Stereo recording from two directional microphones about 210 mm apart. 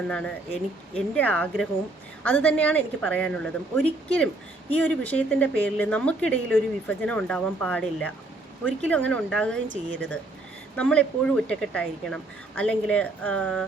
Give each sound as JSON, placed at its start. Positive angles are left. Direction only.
{"t": 0.9, "sound": "a woman's voice", "side_deg": 5}
{"t": 9.6, "sound": "a woman's voice", "side_deg": -60}
{"t": 10.8, "sound": "speech", "side_deg": 5}